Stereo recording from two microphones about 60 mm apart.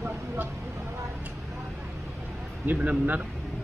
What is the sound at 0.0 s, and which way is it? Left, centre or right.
Vehicle, right.